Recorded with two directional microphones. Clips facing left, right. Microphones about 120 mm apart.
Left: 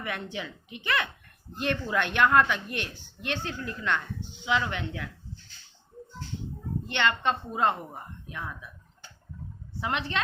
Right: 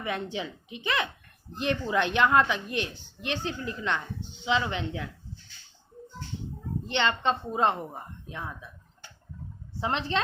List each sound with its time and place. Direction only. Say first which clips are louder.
0.0 s a woman's voice: right 3 dB; 25° right (ahead or behind)
6.8 s a woman's voice: right 1 dB; 25° right (ahead or behind)
9.8 s a woman's voice: right 2 dB; 30° right (ahead or behind)